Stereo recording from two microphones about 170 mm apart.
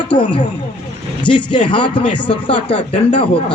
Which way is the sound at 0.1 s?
30° left (ahead or behind).